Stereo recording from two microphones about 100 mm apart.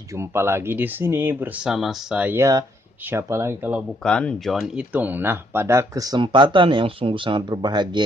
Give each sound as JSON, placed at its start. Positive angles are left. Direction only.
{"t": 0.1, "sound": "speech", "side_deg": -25}
{"t": 1.7, "sound": "speech", "side_deg": -5}
{"t": 2.3, "sound": "speech", "side_deg": -30}
{"t": 4.0, "sound": "speech", "side_deg": 10}
{"t": 4.5, "sound": "speech", "side_deg": -5}
{"t": 4.9, "sound": "speech", "side_deg": -20}
{"t": 6.1, "sound": "speech", "side_deg": -55}